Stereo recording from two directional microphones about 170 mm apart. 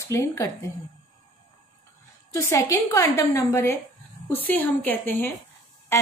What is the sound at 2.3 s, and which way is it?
A woman's voice, 15° left (ahead or behind).